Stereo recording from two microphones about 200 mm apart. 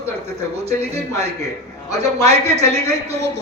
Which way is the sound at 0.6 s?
30° right (ahead or behind).